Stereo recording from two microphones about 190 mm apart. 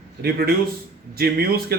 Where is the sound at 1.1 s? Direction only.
55° right (ahead or behind).